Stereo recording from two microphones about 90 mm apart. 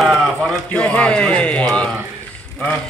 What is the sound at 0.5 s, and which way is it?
Speech, 10° left (ahead or behind).